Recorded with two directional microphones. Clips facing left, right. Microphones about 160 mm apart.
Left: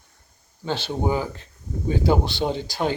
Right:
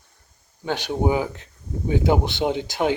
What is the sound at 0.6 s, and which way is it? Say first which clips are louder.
Speech: right 2 dB; 15° right (ahead or behind).